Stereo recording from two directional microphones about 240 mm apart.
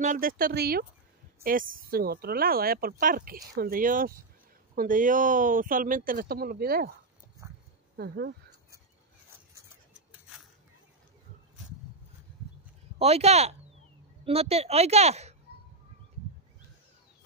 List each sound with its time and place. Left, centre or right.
0.0 s speech: right
7.4 s dog: centre
8.0 s speech: right
13.0 s speech: right